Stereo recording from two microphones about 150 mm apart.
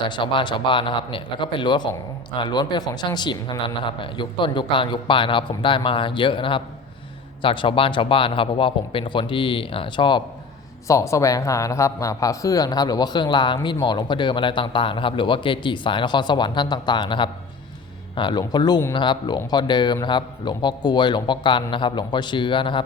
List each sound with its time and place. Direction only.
0.1 s speech: 30° left (ahead or behind)
10.8 s speech: 20° left (ahead or behind)